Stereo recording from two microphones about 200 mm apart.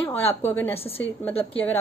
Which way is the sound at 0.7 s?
30° left (ahead or behind).